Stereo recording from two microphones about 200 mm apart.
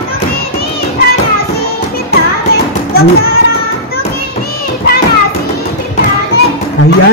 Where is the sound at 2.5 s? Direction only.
50° left (ahead or behind).